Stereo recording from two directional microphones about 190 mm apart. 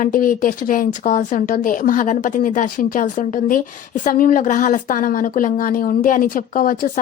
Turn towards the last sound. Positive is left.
turn(degrees=45)  # may be behind; listen again after turning